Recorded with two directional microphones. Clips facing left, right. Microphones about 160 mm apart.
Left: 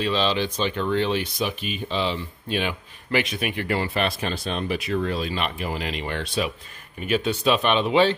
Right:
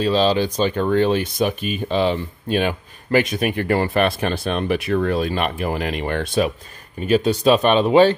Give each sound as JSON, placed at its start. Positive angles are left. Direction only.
{"t": 0.0, "sound": "speech", "side_deg": -40}
{"t": 7.0, "sound": "speech", "side_deg": -40}